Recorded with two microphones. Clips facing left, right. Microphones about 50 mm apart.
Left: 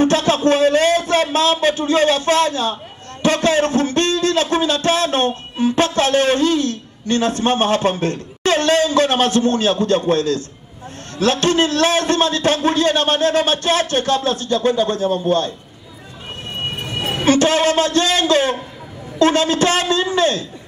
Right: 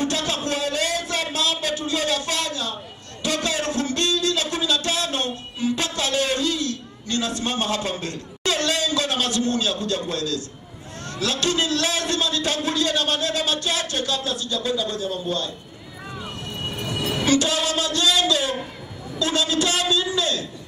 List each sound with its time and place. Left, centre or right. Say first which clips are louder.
0.0 s a sound: left 10 dB; left
3.2 s a man's voice: left 9 dB; left
16.6 s a man's voice: left 3 dB; left